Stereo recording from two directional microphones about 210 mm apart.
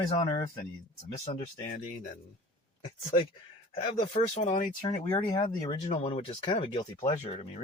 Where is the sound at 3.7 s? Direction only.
25° left (ahead or behind).